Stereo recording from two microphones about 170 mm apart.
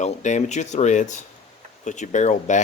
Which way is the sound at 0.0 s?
45° left (ahead or behind).